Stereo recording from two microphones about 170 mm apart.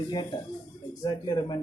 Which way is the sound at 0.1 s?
25° left (ahead or behind).